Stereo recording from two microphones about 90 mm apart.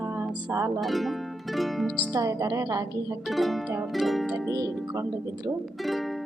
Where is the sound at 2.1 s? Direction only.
40° right (ahead or behind).